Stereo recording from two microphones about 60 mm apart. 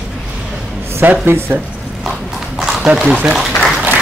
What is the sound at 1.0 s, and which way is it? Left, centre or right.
Speech, right.